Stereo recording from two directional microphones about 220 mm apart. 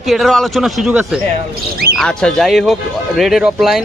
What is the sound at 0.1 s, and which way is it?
A man's voice, centre (ahead or behind).